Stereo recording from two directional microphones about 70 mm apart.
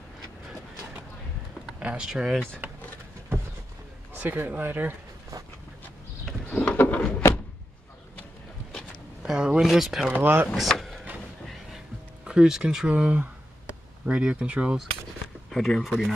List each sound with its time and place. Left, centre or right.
1.8 s speech: centre
2.0 s speech: centre
4.1 s speech: right
6.2 s a sound: centre
7.0 s door: centre
9.2 s a sound: centre
9.7 s speech: centre
10.2 s speech: right
10.5 s speech: centre
11.4 s music: centre
12.3 s speech: centre
15.5 s speech: centre